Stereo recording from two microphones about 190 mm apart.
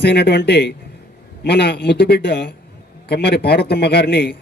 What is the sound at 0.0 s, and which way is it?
A man's voice, 60° left (ahead or behind).